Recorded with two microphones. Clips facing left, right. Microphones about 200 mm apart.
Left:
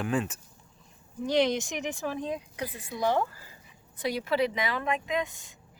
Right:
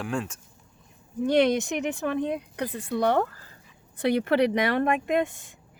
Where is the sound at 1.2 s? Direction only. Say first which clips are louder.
Right 4 dB; 60° right (ahead or behind).